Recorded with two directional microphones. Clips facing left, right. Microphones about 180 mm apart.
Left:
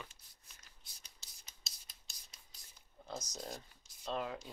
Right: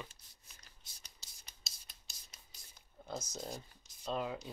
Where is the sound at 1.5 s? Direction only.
Centre (ahead or behind).